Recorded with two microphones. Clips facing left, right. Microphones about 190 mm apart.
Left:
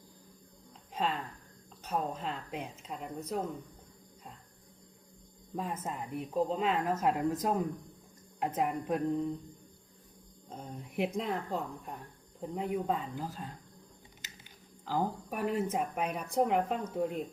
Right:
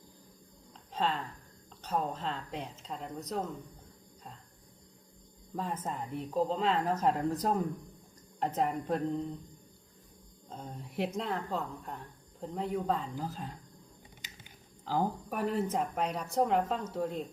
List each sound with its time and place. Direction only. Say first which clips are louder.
0.9 s a woman's voice: right 1 dB; 10° left (ahead or behind)
5.5 s a woman's voice: right 1 dB; 10° left (ahead or behind)
8.4 s a woman's voice: right 1 dB; 10° left (ahead or behind)
10.5 s a woman's voice: left 1 dB; 15° left (ahead or behind)
15.3 s a woman's voice: even; 10° left (ahead or behind)